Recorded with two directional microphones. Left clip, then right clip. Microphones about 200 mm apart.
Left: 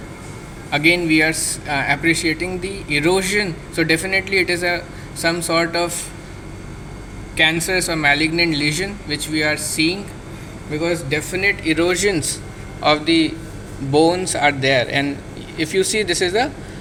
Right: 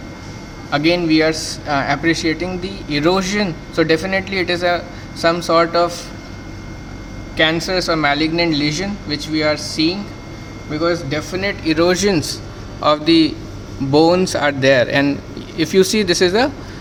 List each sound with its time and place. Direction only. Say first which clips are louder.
0.7 s a man's voice: even; 25° right (ahead or behind)
7.3 s a man's voice: right 1 dB; 25° right (ahead or behind)